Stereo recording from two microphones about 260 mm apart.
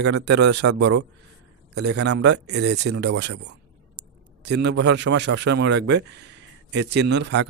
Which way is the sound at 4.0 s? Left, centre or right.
Right.